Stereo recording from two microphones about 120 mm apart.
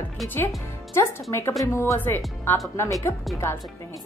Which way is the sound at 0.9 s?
20° left (ahead or behind).